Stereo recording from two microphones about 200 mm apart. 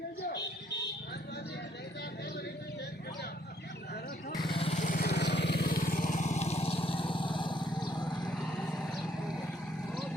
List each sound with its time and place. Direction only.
4.4 s vehicle: 30° left (ahead or behind)